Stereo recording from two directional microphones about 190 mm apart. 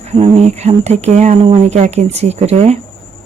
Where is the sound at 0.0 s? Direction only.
35° right (ahead or behind).